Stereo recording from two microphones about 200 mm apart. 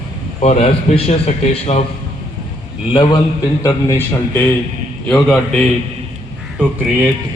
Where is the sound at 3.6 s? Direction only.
15° left (ahead or behind).